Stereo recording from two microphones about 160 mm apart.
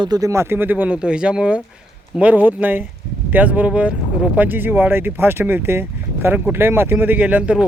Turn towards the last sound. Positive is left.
turn(degrees=-10)  # may be behind; listen again after turning